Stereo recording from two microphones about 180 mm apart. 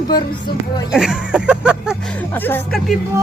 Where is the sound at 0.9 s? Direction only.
5° right (ahead or behind).